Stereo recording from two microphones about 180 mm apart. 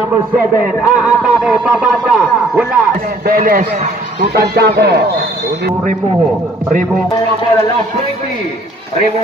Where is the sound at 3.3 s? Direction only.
50° right (ahead or behind); by 5.2 s 65° right (ahead or behind).